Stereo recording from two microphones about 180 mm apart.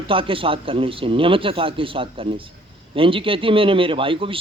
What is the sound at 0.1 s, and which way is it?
Speech, 30° right (ahead or behind).